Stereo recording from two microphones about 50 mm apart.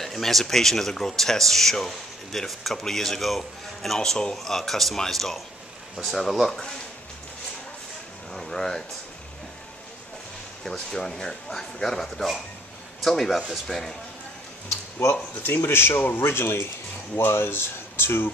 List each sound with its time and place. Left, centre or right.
0.0 s speech: centre
8.3 s a sound: centre
10.6 s speech: centre
15.4 s speech: left